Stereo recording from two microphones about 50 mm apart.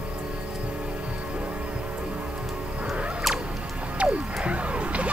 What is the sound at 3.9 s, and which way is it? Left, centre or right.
Music, right.